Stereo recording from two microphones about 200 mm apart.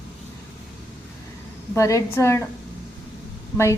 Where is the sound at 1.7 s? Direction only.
15° left (ahead or behind).